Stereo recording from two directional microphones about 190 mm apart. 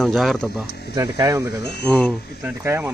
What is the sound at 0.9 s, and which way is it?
Speech, 20° right (ahead or behind).